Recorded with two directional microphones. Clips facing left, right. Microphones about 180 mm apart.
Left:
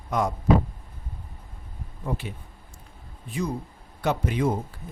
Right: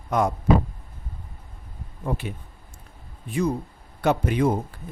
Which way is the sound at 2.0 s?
55° right (ahead or behind).